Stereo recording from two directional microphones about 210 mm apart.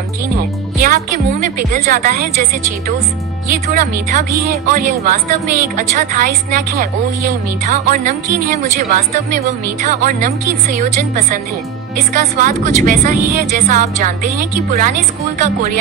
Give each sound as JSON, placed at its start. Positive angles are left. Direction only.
{"t": 0.7, "sound": "a woman's voice", "side_deg": -40}
{"t": 3.4, "sound": "a woman's voice", "side_deg": -40}
{"t": 9.8, "sound": "a woman's voice", "side_deg": -40}